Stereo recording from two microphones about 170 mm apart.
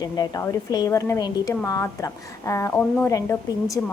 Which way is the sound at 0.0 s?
20° left (ahead or behind).